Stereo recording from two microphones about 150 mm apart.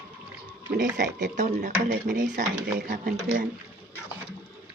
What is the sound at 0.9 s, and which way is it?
Child singing, 55° right (ahead or behind).